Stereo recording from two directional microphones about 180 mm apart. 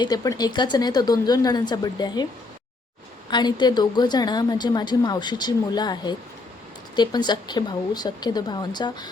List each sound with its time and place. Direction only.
0.0 s a woman's voice: 20° left (ahead or behind)
3.2 s a woman's voice: 25° left (ahead or behind)